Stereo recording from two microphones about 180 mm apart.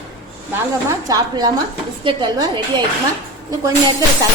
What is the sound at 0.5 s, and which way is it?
A woman's voice, 20° right (ahead or behind).